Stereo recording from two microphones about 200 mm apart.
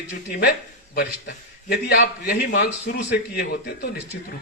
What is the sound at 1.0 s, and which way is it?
A man's voice, 55° left (ahead or behind).